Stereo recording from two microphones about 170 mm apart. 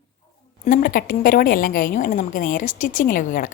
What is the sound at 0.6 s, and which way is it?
A woman's voice, 55° left (ahead or behind).